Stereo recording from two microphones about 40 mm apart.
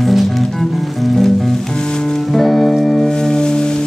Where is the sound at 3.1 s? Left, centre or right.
Centre.